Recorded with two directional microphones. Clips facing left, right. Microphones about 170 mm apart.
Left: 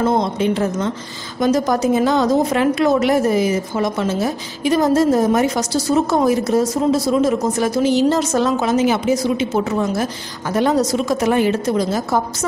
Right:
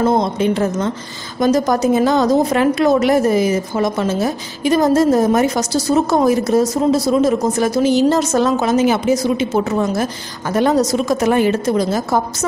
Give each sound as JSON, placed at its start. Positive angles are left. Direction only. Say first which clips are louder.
{"t": 0.0, "sound": "a woman's voice", "louder": "right 2 dB", "side_deg": -40}